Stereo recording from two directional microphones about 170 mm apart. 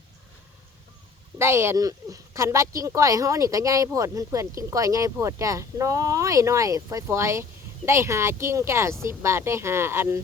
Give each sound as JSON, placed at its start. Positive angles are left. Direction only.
{"t": 1.4, "sound": "speech", "side_deg": -15}